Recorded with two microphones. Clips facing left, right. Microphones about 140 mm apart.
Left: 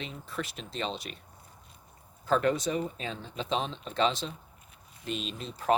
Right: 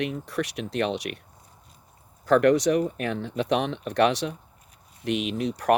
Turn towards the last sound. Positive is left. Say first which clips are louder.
# right 7 dB
turn(degrees=-75)  # may be behind; listen again after turning